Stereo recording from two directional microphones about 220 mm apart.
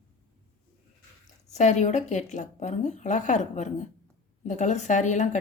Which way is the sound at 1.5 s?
30° left (ahead or behind).